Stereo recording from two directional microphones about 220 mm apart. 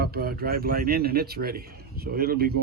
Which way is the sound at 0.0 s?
45° right (ahead or behind).